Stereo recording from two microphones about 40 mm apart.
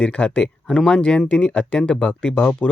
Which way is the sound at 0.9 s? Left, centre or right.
Left.